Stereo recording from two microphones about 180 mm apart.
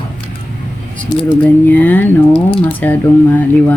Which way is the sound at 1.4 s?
10° left (ahead or behind).